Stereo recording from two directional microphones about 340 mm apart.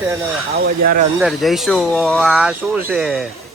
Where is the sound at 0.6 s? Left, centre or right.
Right.